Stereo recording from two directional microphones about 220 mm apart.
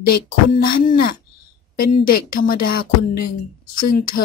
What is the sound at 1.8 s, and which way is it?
A woman's voice, 40° left (ahead or behind).